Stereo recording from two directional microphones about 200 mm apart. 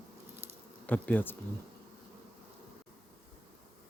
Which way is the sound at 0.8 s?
10° left (ahead or behind).